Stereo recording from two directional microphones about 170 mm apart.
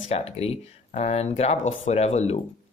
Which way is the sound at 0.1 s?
35° left (ahead or behind).